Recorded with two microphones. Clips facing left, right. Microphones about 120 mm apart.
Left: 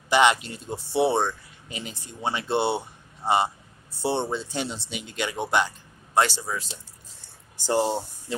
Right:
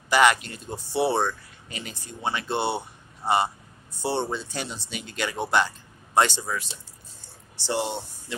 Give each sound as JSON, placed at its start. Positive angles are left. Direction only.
{"t": 0.1, "sound": "speech", "side_deg": 25}
{"t": 4.0, "sound": "speech", "side_deg": 25}
{"t": 7.6, "sound": "speech", "side_deg": 40}